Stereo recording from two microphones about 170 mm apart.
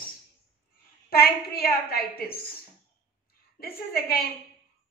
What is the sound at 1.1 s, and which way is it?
A woman's voice, 65° left (ahead or behind).